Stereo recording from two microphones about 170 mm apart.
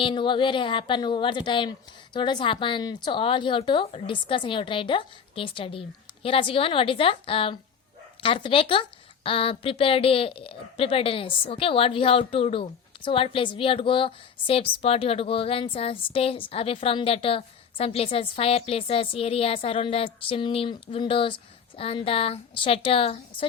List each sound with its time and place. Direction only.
0.0 s a woman's voice: 30° left (ahead or behind)